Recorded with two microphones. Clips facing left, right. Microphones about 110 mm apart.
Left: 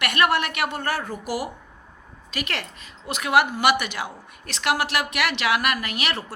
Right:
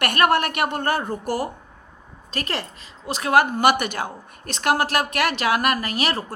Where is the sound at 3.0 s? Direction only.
35° right (ahead or behind).